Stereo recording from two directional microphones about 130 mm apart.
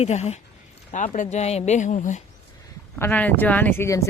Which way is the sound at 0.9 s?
80° left.